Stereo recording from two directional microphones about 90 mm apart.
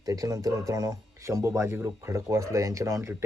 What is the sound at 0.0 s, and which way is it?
Speech, 40° right (ahead or behind).